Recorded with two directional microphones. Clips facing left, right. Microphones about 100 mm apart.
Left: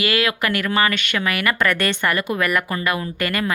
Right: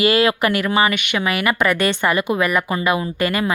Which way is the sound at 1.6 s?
10° right (ahead or behind).